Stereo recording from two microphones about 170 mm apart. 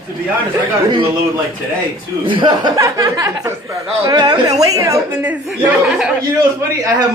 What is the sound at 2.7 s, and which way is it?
Speech, 20° right (ahead or behind).